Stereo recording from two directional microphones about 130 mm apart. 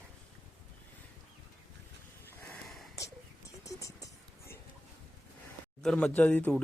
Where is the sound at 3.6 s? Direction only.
25° left (ahead or behind).